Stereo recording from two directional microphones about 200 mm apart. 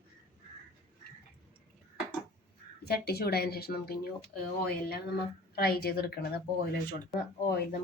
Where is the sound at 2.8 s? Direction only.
50° left (ahead or behind).